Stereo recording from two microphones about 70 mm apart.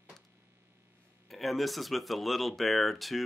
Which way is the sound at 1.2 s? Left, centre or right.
Centre.